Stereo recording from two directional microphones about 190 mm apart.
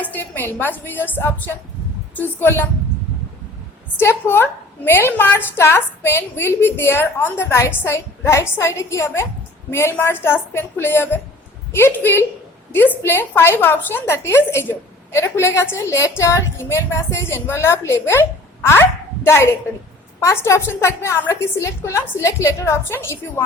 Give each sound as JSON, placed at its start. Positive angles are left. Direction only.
{"t": 0.0, "sound": "a woman's voice", "side_deg": 10}
{"t": 3.9, "sound": "a woman's voice", "side_deg": 15}